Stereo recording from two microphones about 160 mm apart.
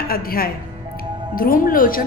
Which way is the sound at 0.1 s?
70° left (ahead or behind).